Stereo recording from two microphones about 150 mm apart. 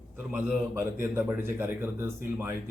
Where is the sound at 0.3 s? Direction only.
5° right (ahead or behind).